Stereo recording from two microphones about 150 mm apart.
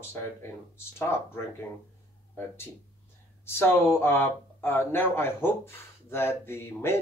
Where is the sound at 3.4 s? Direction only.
15° left (ahead or behind).